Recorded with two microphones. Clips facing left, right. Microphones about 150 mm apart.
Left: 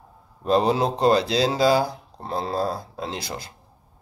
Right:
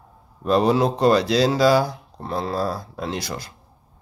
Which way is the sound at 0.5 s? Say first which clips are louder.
Right 2 dB; 25° left (ahead or behind).